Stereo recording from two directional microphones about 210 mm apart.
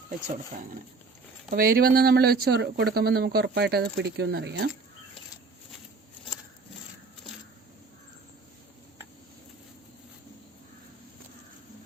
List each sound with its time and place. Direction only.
1.5 s speech: 45° right (ahead or behind)